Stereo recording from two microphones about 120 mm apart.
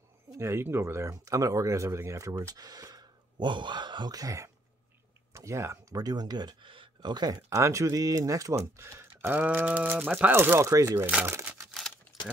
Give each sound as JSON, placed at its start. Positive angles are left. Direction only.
{"t": 0.4, "sound": "speech", "side_deg": -20}
{"t": 11.1, "sound": "speech", "side_deg": -10}
{"t": 11.4, "sound": "a sound", "side_deg": 0}